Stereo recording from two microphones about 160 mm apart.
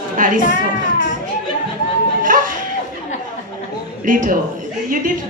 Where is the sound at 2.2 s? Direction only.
55° right (ahead or behind).